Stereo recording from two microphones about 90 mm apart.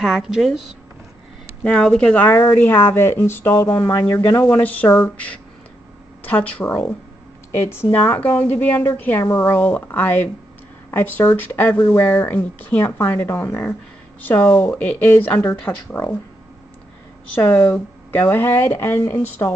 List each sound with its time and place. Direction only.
0.0 s speech: 5° right (ahead or behind)
1.6 s speech: 10° left (ahead or behind)
2.2 s speech: 30° left (ahead or behind)
9.6 s speech: 20° left (ahead or behind)
17.4 s speech: 25° left (ahead or behind)